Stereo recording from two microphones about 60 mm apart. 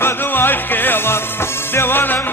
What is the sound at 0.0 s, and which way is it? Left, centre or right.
Music, left.